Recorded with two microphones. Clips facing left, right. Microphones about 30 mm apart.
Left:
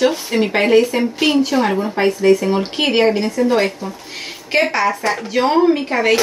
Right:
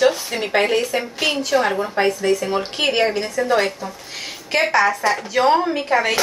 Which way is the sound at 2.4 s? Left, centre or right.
Centre.